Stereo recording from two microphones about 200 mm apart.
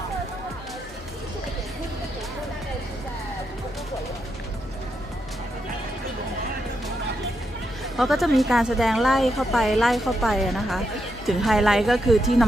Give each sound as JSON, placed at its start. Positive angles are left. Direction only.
{"t": 7.9, "sound": "a woman's voice", "side_deg": 0}